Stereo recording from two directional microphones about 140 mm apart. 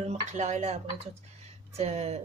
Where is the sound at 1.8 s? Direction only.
50° right (ahead or behind).